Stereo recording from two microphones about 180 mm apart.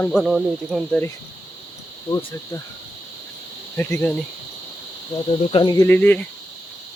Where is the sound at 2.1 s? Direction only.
25° left (ahead or behind).